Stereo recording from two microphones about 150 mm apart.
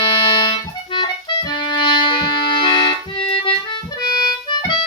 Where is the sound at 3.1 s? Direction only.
35° left (ahead or behind).